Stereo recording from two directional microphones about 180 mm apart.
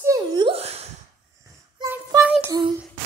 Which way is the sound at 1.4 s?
15° right (ahead or behind).